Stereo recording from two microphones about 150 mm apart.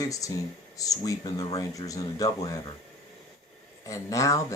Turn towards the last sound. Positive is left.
turn(degrees=20)  # may be behind; listen again after turning